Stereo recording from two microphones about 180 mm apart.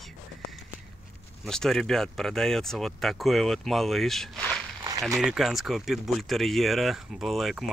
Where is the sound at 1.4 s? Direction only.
Centre (ahead or behind).